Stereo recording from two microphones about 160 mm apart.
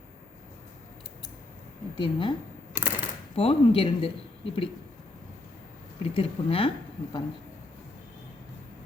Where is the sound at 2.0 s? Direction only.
30° left (ahead or behind).